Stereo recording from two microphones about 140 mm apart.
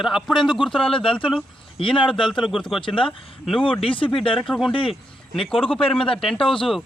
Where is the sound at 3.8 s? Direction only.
40° left (ahead or behind).